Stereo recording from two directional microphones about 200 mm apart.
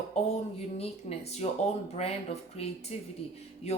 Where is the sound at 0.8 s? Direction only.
30° left (ahead or behind).